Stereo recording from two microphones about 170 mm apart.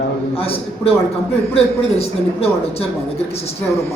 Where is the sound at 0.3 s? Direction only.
35° left (ahead or behind).